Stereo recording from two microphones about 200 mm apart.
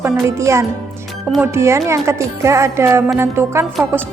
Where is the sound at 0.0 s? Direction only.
15° right (ahead or behind).